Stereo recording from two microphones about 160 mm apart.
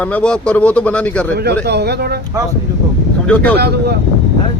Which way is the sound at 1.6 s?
90° right.